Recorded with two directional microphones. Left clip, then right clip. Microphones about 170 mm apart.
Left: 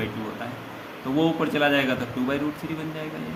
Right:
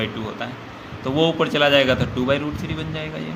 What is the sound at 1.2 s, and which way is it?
Speech, 50° right (ahead or behind).